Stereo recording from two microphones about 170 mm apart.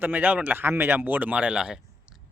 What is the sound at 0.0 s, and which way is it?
A man's voice, 10° right (ahead or behind).